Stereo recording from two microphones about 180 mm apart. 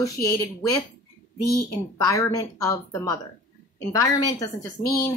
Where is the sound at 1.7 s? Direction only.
15° left (ahead or behind).